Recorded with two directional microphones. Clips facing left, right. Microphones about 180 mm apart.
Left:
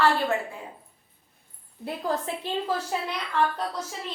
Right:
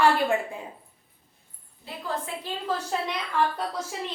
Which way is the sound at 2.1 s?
40° left (ahead or behind).